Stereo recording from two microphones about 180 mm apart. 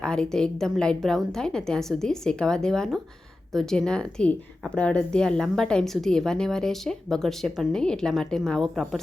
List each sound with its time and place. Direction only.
0.0 s a woman's voice: 5° left (ahead or behind)